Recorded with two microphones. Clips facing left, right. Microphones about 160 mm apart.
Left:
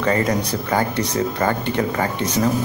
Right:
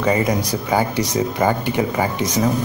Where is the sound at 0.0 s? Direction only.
10° right (ahead or behind).